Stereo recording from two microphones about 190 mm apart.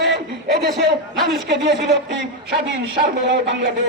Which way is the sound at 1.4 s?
65° right (ahead or behind).